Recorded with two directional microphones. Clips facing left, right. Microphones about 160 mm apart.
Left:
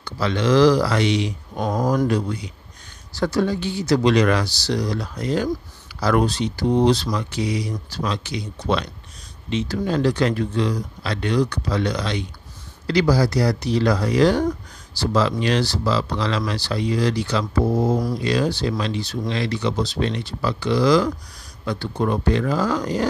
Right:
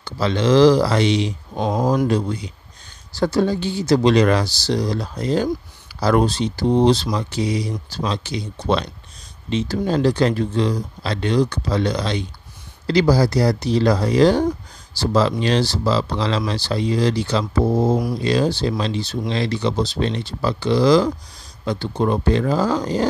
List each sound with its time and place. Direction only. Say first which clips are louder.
0.0 s speech: right 2 dB; 25° right (ahead or behind)
17.9 s speech: right 1 dB; 10° right (ahead or behind)
18.2 s speech: right 2 dB; 30° right (ahead or behind)